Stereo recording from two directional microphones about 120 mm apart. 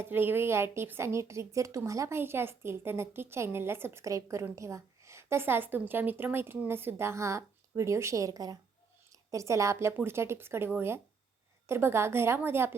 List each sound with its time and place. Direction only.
0.0 s a woman's voice: 15° right (ahead or behind)